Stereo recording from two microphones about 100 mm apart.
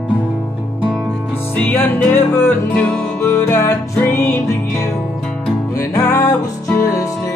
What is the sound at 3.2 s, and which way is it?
Music, 25° left (ahead or behind).